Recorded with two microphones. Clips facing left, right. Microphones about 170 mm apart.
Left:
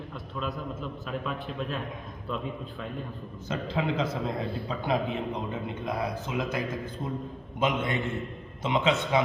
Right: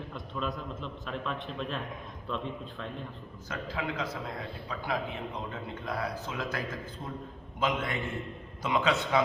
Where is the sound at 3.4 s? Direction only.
25° left (ahead or behind).